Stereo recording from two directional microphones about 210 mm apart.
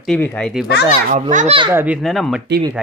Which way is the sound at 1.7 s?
5° right (ahead or behind).